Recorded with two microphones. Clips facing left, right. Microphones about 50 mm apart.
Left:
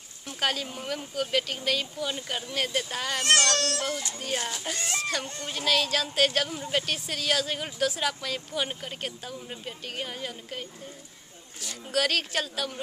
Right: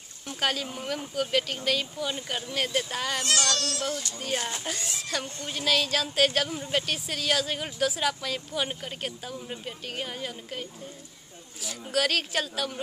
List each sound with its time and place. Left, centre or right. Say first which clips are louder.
0.4 s speech: even; centre
3.3 s speech: left 7 dB; left
4.6 s speech: left 3 dB; centre